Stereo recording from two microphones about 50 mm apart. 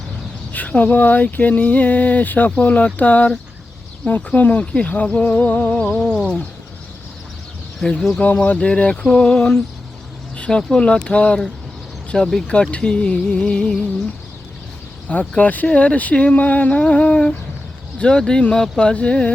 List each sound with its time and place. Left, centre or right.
0.5 s a sound: left
4.6 s speech: left
5.8 s speech: centre
7.9 s speech: centre
8.2 s speech: left
10.3 s a sound: left
10.8 s speech: centre
15.1 s a sound: left
15.6 s speech: left